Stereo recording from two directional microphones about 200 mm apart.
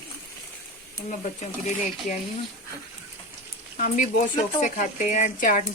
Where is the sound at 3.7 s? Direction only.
40° left (ahead or behind).